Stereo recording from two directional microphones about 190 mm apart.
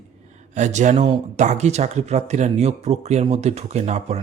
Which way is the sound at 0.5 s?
40° right (ahead or behind).